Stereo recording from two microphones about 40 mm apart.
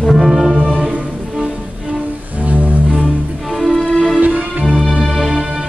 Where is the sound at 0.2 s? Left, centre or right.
Centre.